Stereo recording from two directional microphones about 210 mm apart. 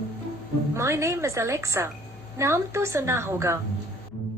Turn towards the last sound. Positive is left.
turn(degrees=-15)  # may be behind; listen again after turning